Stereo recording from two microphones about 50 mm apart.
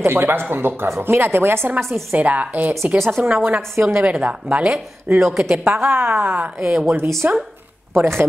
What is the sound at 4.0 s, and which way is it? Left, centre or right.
A woman's voice, right.